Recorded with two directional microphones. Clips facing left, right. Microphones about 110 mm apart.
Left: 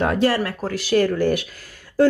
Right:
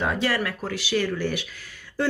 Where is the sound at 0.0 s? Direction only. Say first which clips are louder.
Left 7 dB; 55° left (ahead or behind).